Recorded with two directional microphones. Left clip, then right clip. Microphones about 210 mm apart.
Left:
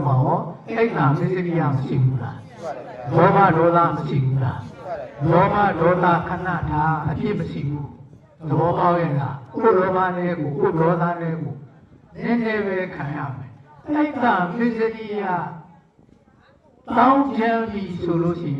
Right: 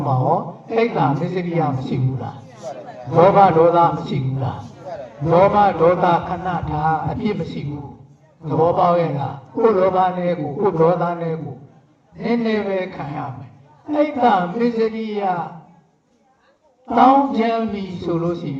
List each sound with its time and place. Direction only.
0.8 s a man's voice: 50° right (ahead or behind)
16.9 s a man's voice: 50° right (ahead or behind)